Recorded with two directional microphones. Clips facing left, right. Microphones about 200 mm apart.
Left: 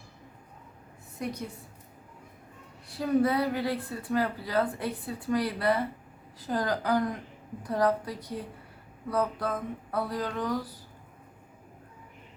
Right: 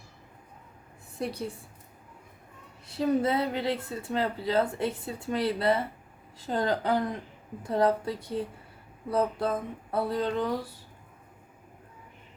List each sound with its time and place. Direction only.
1.2 s a woman's voice: 30° right (ahead or behind)
2.9 s a woman's voice: 25° right (ahead or behind)